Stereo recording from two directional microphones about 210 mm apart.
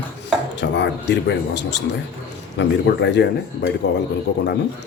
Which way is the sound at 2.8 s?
55° left (ahead or behind).